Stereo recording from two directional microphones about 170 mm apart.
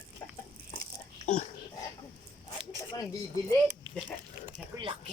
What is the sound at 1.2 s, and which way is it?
Dog, 45° left (ahead or behind).